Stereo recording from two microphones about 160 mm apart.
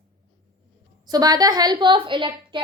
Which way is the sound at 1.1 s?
25° right (ahead or behind).